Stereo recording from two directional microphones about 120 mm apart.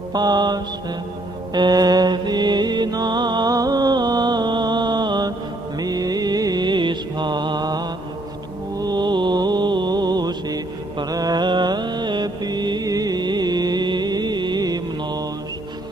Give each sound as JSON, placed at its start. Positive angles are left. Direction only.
{"t": 0.1, "sound": "mantra", "side_deg": -35}
{"t": 1.5, "sound": "music", "side_deg": -35}
{"t": 5.8, "sound": "mantra", "side_deg": -30}